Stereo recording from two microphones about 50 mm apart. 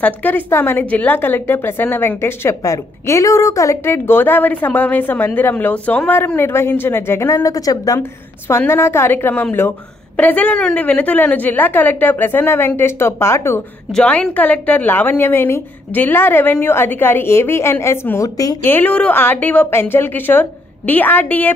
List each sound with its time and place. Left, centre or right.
0.0 s a woman's voice: left
0.8 s a woman's voice: left
3.8 s a woman's voice: left
6.1 s a woman's voice: left
8.5 s a woman's voice: left
9.3 s a woman's voice: left
13.9 s a woman's voice: left
14.9 s a woman's voice: left
18.6 s a woman's voice: left
18.9 s a woman's voice: left
19.7 s a woman's voice: left